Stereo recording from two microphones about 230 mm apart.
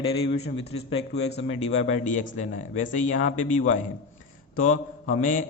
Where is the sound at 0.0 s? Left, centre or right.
Left.